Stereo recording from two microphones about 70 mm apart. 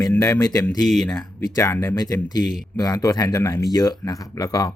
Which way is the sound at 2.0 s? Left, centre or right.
Left.